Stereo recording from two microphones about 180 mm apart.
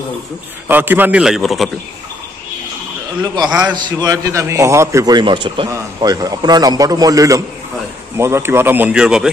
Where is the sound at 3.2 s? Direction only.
25° right (ahead or behind).